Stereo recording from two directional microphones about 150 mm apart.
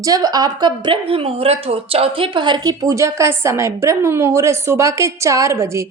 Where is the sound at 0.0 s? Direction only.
25° right (ahead or behind).